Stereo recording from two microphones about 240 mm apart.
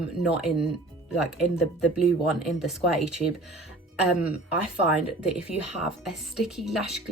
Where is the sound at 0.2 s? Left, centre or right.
Centre.